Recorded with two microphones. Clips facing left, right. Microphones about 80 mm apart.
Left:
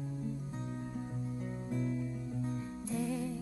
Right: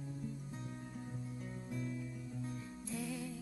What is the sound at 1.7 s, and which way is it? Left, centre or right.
Music, centre.